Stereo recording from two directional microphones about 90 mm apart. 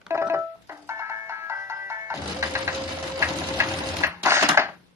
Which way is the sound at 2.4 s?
30° right (ahead or behind).